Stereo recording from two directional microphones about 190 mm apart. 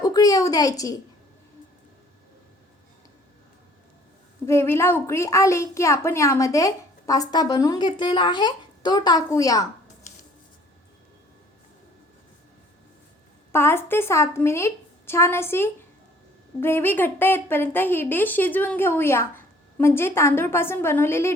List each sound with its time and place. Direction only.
0.0 s a woman's voice: 20° left (ahead or behind)
4.4 s a child's voice: 15° left (ahead or behind)
13.5 s a child's voice: 10° left (ahead or behind)